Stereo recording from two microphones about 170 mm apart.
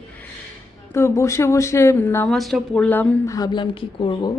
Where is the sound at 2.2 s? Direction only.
Centre (ahead or behind).